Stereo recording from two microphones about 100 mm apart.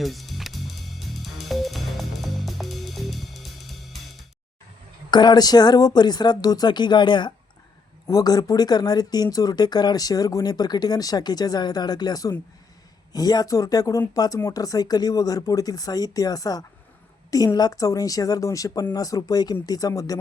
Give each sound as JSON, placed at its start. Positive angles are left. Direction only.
{"t": 0.0, "sound": "music", "side_deg": 0}
{"t": 5.1, "sound": "speech", "side_deg": 45}
{"t": 8.0, "sound": "speech", "side_deg": 40}